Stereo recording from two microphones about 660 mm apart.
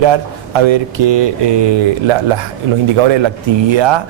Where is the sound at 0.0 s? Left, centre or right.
Right.